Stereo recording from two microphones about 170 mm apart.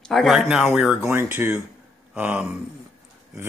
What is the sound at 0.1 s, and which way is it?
Speech, centre (ahead or behind).